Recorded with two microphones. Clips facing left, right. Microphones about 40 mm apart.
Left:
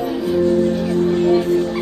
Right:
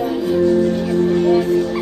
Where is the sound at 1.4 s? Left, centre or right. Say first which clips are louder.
Right 1 dB; left.